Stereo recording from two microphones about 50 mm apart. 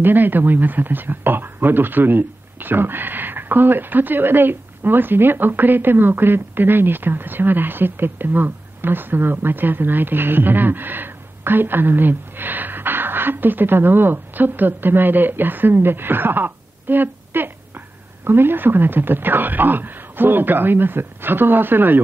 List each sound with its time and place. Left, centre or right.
0.0 s speech: right